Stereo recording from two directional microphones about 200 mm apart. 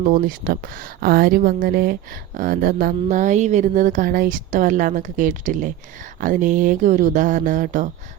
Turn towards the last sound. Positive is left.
turn(degrees=-40)  # may be behind; listen again after turning